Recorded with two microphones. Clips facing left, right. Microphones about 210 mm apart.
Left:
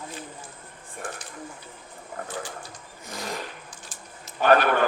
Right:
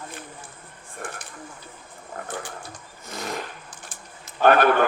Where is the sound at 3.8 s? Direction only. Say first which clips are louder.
Right 1 dB; 55° right (ahead or behind).